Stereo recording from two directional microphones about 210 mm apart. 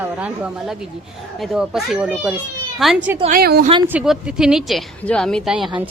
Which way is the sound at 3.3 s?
45° right (ahead or behind).